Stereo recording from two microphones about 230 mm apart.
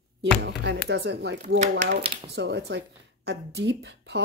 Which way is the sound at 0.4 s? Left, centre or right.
Right.